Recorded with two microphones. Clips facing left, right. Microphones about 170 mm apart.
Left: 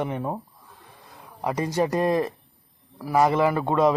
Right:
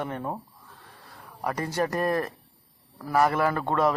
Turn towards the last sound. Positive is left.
turn(degrees=15)  # may be behind; listen again after turning